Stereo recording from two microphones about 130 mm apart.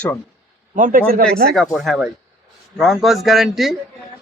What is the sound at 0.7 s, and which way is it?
Speech, 90° right.